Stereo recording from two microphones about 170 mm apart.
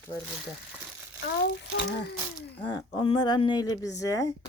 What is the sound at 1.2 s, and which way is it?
Speech, 75° left (ahead or behind).